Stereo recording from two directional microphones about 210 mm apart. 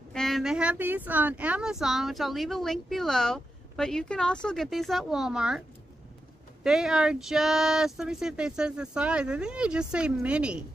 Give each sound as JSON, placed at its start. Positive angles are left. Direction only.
{"t": 0.1, "sound": "speech", "side_deg": 0}
{"t": 6.6, "sound": "speech", "side_deg": -5}